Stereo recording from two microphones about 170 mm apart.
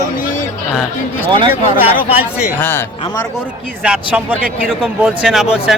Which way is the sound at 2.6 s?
15° left (ahead or behind).